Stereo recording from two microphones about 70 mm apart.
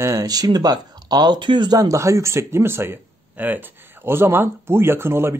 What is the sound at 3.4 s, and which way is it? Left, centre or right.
A man's voice, right.